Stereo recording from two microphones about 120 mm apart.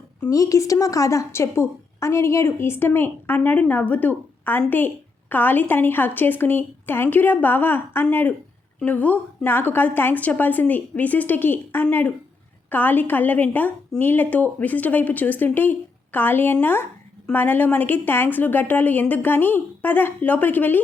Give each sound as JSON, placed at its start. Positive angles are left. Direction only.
{"t": 0.2, "sound": "a woman's voice", "side_deg": 25}